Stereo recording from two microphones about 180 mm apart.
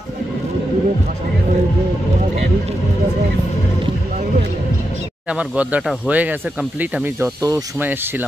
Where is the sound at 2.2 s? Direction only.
40° right (ahead or behind).